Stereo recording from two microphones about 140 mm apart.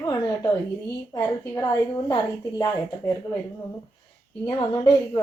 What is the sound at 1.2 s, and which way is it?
Speech, 30° left (ahead or behind).